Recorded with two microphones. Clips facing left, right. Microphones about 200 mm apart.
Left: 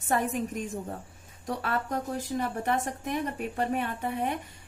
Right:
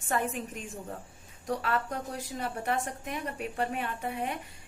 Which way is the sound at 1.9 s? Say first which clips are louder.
Left 5 dB; 45° left (ahead or behind).